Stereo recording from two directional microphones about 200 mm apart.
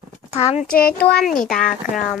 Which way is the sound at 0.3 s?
35° left (ahead or behind).